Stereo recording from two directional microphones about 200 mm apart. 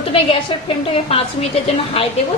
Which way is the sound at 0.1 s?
25° left (ahead or behind).